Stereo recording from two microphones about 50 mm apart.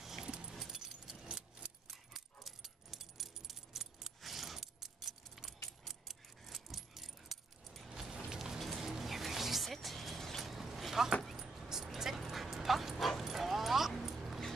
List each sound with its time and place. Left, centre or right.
0.0 s keys jangling: centre
1.2 s keys jangling: centre
1.9 s dog: centre
5.9 s keys jangling: centre
7.9 s music: centre
8.4 s music: centre
11.2 s dog: centre
13.2 s keys jangling: centre